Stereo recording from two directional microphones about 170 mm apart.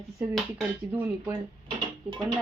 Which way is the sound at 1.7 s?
30° right (ahead or behind).